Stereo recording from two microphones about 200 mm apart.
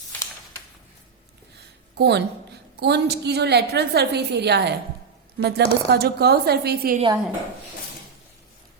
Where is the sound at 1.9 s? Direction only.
55° right (ahead or behind).